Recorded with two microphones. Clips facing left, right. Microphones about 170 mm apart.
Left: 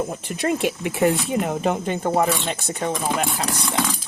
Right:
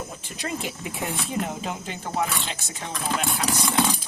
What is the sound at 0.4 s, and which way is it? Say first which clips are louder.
Speech: left 9 dB; 70° left (ahead or behind).